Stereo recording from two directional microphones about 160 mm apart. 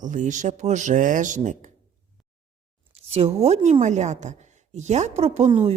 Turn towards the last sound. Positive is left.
turn(degrees=-40)  # may be behind; listen again after turning